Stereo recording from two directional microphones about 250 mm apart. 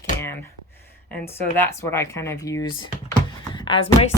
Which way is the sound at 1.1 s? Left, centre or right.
Centre.